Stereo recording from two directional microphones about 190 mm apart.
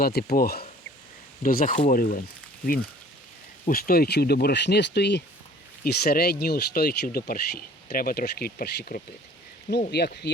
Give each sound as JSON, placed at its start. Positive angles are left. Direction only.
{"t": 0.0, "sound": "speech", "side_deg": 55}
{"t": 3.7, "sound": "speech", "side_deg": 50}